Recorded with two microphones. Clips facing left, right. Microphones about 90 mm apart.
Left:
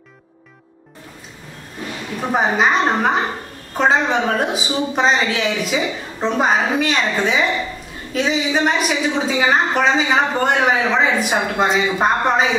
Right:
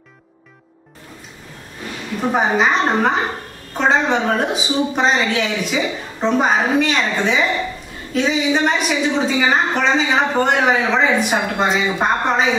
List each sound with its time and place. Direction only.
2.3 s a woman's voice: centre (ahead or behind)